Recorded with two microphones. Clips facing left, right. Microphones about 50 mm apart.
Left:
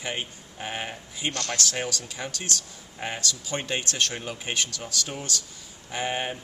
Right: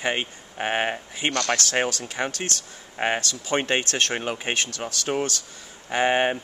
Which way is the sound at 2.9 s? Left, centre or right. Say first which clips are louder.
Right 9 dB; right.